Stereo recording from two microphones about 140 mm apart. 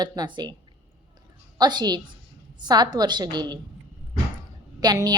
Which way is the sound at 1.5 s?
30° right (ahead or behind).